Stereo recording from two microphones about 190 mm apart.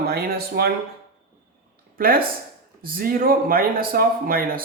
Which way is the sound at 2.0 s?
50° right (ahead or behind).